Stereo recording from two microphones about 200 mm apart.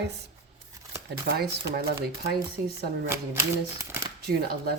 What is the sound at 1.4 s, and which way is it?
Speech, 50° right (ahead or behind).